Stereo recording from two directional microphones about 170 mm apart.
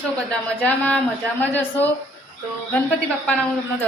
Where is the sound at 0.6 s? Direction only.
10° left (ahead or behind).